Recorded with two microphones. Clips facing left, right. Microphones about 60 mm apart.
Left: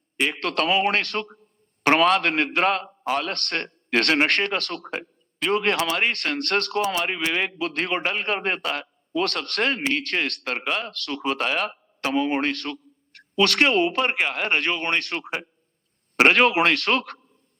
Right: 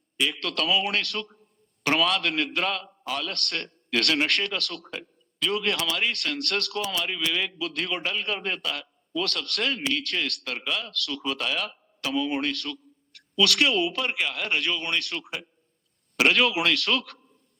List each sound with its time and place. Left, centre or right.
0.2 s a man's voice: left